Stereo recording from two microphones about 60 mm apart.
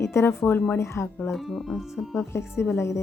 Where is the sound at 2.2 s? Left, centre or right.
Left.